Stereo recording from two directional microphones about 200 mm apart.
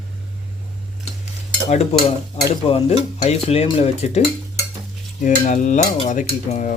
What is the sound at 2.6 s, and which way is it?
Cutlery, 30° left (ahead or behind).